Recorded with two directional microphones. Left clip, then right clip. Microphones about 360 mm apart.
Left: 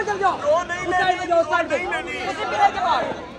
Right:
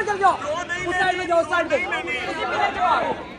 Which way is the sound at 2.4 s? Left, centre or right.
Centre.